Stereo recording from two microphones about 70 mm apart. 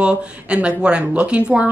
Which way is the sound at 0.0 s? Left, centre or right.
Centre.